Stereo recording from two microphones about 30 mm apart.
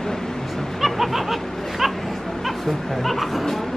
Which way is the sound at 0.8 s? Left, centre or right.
Centre.